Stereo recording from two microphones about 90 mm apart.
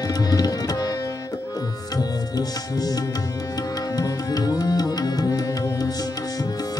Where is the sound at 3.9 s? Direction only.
45° left (ahead or behind).